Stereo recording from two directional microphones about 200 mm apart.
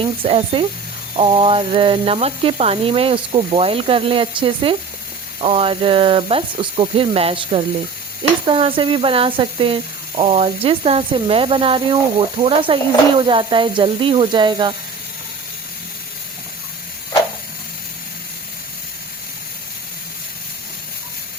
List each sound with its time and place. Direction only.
0.0 s speech: 25° right (ahead or behind)